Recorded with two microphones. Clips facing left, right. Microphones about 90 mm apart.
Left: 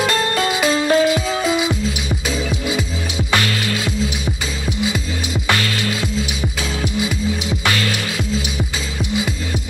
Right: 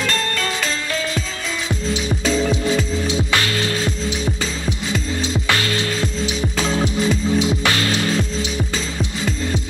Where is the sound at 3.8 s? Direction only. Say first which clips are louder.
Even; 10° left (ahead or behind).